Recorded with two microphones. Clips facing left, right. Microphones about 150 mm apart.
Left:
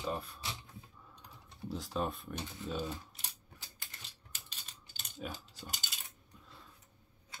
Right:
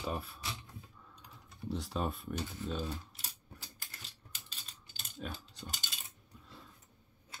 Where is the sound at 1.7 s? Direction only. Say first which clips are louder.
Even; centre (ahead or behind).